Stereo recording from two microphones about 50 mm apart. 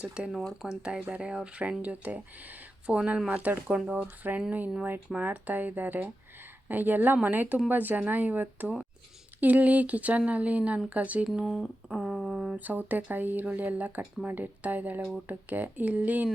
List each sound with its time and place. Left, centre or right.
0.0 s speech: right
3.2 s speech: right
11.4 s a sound: centre
12.5 s speech: right